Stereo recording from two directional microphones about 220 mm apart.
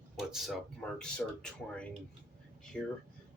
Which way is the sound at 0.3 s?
Centre (ahead or behind).